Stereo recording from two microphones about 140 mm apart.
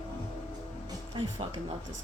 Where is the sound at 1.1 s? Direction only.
35° right (ahead or behind).